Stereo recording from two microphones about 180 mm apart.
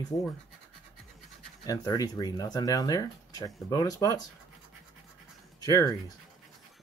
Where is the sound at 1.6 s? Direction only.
20° left (ahead or behind).